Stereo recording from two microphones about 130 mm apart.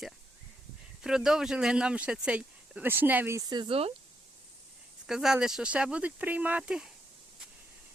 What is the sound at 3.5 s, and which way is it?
Speech, 40° right (ahead or behind).